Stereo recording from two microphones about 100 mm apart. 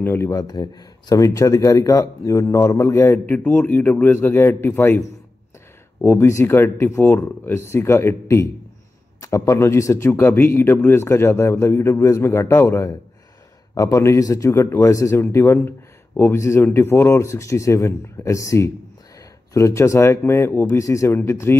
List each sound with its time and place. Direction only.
0.0 s speech: 25° left (ahead or behind)
0.4 s a man's voice: 40° left (ahead or behind); by 21.5 s 25° left (ahead or behind)